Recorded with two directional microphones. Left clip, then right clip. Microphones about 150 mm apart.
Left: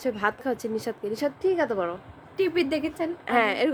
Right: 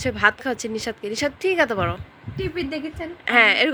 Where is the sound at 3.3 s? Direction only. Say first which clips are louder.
Right 7 dB; centre (ahead or behind).